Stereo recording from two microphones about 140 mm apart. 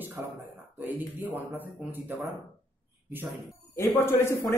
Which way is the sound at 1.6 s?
15° right (ahead or behind).